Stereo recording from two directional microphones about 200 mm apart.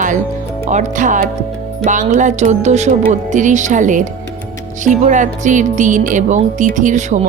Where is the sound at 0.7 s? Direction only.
40° right (ahead or behind).